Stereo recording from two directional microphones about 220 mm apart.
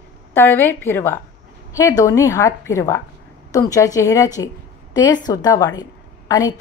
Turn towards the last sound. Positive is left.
turn(degrees=15)  # may be behind; listen again after turning